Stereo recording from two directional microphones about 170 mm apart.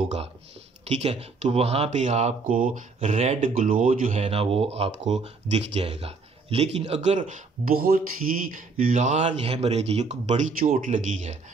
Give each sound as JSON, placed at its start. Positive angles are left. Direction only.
{"t": 0.8, "sound": "speech", "side_deg": -40}